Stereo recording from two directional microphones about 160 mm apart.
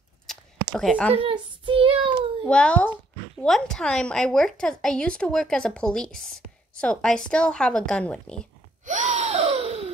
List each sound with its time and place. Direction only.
0.3 s a sound: 5° left (ahead or behind)
0.7 s a woman's voice: 5° left (ahead or behind)
1.1 s a child's voice: 35° right (ahead or behind)
2.4 s a child's voice: 5° left (ahead or behind)
8.8 s gasp: 50° right (ahead or behind)